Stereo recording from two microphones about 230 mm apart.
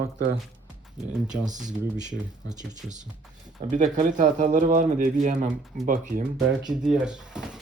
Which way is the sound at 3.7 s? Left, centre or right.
Right.